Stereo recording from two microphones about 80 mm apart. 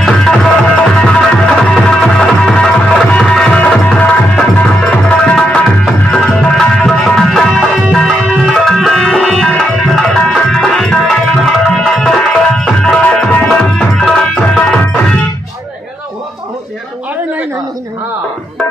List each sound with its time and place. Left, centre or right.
0.0 s music: centre
8.5 s tabla: centre
13.0 s music: centre